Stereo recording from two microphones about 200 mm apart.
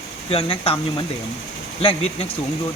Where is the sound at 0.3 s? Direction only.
30° left (ahead or behind).